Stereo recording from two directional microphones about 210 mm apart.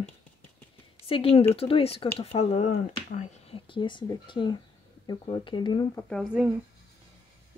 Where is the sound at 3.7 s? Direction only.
20° left (ahead or behind).